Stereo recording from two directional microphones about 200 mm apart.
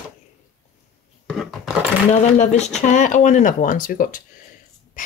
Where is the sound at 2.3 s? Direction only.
35° left (ahead or behind).